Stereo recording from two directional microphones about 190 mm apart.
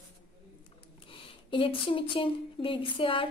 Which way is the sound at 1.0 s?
30° left (ahead or behind).